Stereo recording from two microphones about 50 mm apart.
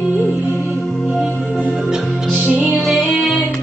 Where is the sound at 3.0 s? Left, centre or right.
Left.